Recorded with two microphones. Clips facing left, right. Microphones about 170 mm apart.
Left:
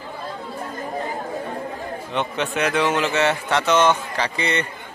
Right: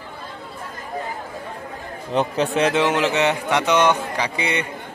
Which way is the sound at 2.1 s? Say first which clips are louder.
Right 5 dB; 35° right (ahead or behind).